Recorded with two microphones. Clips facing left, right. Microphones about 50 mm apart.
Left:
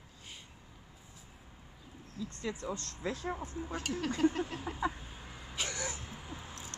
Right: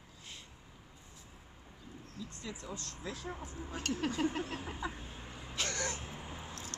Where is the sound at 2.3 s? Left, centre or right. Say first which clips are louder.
Left 7 dB; left.